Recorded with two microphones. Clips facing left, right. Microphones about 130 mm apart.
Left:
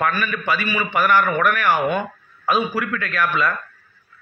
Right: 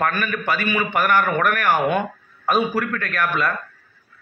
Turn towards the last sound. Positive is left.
turn(degrees=-50)  # may be behind; listen again after turning